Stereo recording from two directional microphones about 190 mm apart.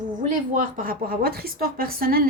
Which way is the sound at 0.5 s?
45° right (ahead or behind).